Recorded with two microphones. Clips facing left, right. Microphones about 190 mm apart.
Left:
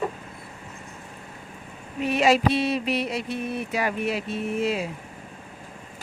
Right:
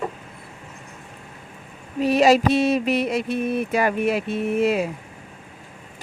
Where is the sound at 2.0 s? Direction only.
40° right (ahead or behind); by 4.8 s 60° right (ahead or behind).